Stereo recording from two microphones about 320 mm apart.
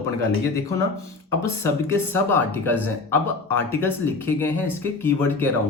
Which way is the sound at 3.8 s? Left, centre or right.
Centre.